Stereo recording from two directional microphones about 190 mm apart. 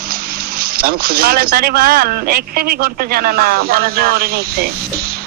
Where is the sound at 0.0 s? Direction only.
55° right (ahead or behind).